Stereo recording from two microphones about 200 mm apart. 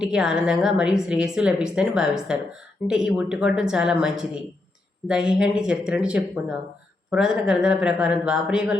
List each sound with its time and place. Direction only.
0.0 s a woman's voice: 5° right (ahead or behind)